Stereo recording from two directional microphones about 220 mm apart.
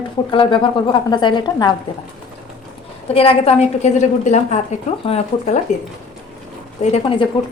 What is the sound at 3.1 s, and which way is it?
A woman's voice, 25° left (ahead or behind).